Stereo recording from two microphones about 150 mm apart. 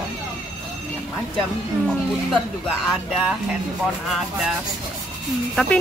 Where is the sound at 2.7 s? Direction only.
5° right (ahead or behind).